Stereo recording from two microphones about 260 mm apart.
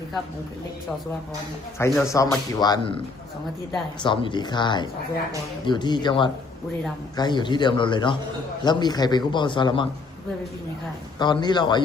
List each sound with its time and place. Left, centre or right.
1.8 s speech: centre
4.0 s speech: centre
11.2 s speech: centre